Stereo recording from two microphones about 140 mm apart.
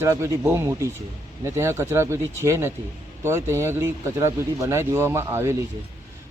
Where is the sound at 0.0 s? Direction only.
20° right (ahead or behind).